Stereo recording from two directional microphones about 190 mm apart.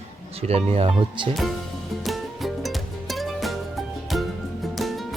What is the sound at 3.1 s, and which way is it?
Music, centre (ahead or behind).